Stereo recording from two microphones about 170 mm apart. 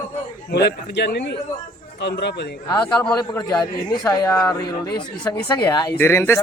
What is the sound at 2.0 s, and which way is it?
Speech, 90° left.